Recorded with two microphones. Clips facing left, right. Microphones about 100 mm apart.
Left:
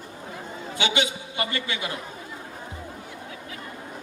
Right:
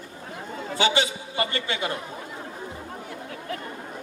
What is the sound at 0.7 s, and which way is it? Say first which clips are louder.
A man's voice: right 3 dB; 35° right (ahead or behind).